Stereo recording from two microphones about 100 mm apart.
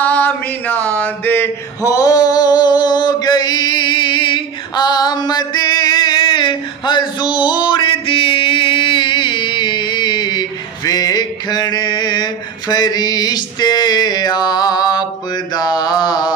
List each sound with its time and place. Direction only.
0.0 s mantra: 15° left (ahead or behind)
1.8 s male singing: 35° left (ahead or behind)
10.9 s mantra: 40° left (ahead or behind)